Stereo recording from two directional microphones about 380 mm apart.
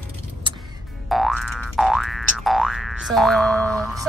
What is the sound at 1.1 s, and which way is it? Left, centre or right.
Boing, centre.